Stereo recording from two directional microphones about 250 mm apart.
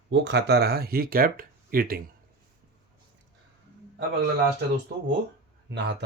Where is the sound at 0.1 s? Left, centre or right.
Right.